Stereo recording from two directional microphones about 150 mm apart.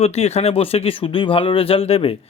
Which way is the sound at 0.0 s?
45° left (ahead or behind).